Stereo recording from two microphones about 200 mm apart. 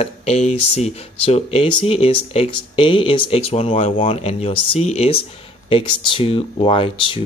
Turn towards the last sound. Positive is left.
turn(degrees=25)  # may be behind; listen again after turning